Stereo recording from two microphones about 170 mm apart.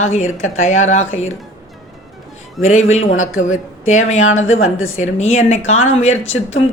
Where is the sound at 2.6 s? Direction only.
40° left (ahead or behind).